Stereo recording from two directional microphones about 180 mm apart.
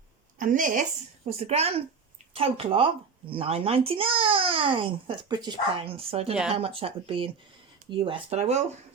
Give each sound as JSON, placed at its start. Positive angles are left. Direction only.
{"t": 0.3, "sound": "a woman's voice", "side_deg": -45}
{"t": 1.3, "sound": "speech", "side_deg": -35}